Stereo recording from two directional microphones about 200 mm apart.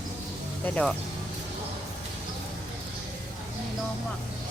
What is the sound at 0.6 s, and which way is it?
Speech, 5° left (ahead or behind).